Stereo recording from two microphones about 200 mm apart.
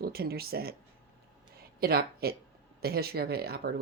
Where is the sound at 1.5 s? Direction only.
50° right (ahead or behind).